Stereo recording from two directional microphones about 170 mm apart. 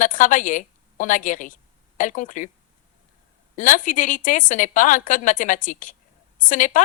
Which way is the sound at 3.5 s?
50° left (ahead or behind).